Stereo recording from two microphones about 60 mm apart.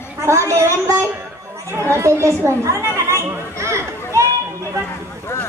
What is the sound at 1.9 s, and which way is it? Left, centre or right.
A woman's voice, right.